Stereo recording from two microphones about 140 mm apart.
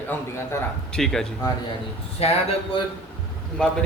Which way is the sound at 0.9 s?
5° left (ahead or behind).